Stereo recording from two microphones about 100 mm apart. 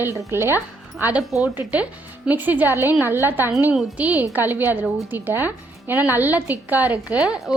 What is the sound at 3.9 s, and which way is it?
A woman's voice, 15° right (ahead or behind).